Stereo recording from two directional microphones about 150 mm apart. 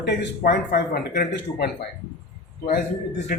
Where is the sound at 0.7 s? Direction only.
90° left.